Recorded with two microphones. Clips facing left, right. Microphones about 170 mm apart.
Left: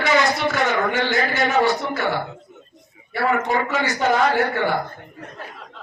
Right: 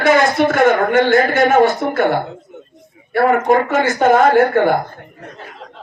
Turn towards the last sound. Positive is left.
turn(degrees=-50)  # may be behind; listen again after turning